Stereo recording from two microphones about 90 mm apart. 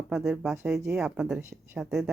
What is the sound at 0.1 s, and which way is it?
Speech, 5° right (ahead or behind).